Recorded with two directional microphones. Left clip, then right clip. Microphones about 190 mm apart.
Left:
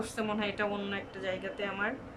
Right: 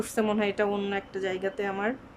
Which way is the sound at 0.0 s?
35° right (ahead or behind).